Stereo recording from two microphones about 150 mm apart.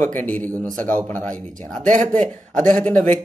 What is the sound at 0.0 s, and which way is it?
Speech, 55° right (ahead or behind).